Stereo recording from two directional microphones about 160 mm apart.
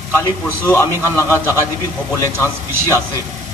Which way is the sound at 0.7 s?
15° left (ahead or behind).